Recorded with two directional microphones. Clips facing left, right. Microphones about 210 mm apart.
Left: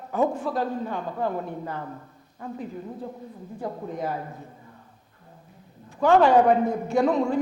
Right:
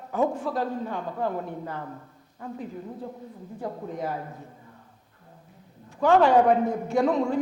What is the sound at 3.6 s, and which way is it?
Speech, 20° left (ahead or behind).